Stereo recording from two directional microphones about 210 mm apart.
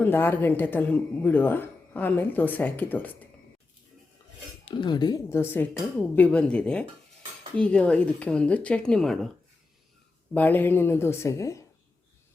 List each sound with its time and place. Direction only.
0.0 s speech: 10° left (ahead or behind)
4.6 s speech: 20° left (ahead or behind); by 9.3 s centre (ahead or behind)
10.3 s speech: 10° left (ahead or behind)